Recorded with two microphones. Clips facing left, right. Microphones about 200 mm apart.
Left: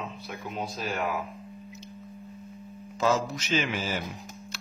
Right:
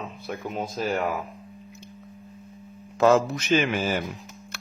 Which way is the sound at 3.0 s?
60° right (ahead or behind).